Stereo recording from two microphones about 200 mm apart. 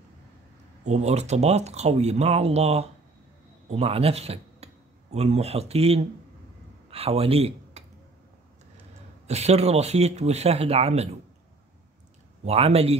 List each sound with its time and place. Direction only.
0.8 s speech: 35° right (ahead or behind)
9.3 s speech: 30° right (ahead or behind)
12.4 s speech: 30° right (ahead or behind)